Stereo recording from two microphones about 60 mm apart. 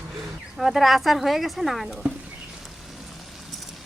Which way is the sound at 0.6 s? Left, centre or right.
Centre.